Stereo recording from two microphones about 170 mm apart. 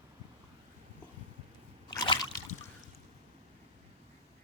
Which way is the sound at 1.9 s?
25° left (ahead or behind).